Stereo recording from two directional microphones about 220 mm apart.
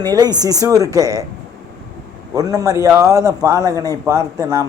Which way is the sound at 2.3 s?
15° right (ahead or behind).